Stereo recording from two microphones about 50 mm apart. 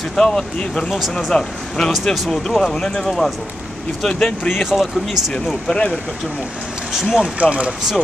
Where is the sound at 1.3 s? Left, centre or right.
Centre.